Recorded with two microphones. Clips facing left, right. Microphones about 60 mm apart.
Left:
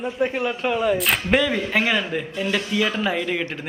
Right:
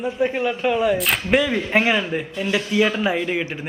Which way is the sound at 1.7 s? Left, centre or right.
Centre.